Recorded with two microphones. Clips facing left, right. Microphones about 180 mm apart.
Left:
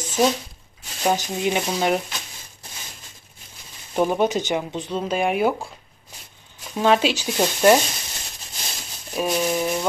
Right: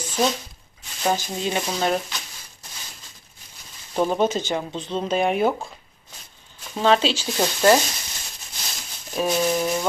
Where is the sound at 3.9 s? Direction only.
10° left (ahead or behind).